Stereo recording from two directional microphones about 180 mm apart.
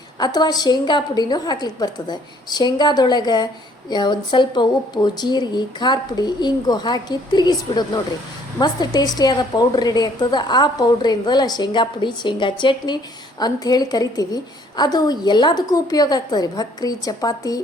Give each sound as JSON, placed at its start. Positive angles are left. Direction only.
{"t": 0.2, "sound": "a woman's voice", "side_deg": 25}